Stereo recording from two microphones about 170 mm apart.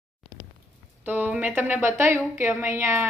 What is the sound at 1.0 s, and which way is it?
Speech, 10° right (ahead or behind).